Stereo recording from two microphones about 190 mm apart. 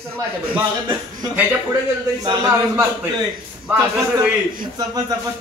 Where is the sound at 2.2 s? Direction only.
15° right (ahead or behind).